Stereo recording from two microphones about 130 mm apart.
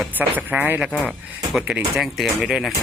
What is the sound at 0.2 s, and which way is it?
Speech, 15° right (ahead or behind).